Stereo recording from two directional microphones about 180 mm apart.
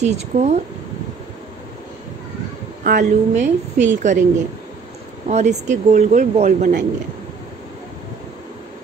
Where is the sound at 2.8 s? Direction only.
45° right (ahead or behind).